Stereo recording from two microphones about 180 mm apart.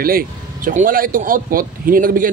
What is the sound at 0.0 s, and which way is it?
Speech, 55° right (ahead or behind).